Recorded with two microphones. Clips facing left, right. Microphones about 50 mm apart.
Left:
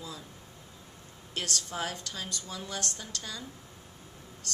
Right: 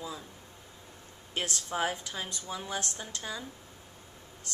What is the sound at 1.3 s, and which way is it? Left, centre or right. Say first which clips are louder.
Speech: right 1 dB; centre.